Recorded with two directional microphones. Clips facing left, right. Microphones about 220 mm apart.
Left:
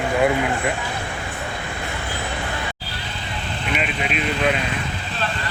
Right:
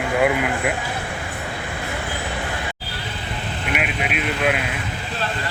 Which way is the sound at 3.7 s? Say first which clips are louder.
Even; 5° right (ahead or behind).